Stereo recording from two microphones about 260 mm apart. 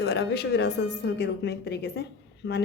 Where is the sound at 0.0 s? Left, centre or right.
Left.